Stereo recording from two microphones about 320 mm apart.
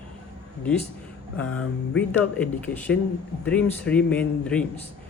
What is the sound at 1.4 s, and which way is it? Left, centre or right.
Speech, left.